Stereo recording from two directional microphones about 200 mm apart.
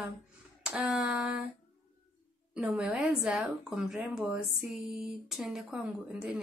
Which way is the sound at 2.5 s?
5° right (ahead or behind).